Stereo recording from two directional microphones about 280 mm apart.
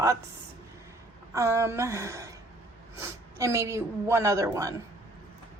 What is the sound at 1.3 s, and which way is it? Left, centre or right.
A woman's voice, centre.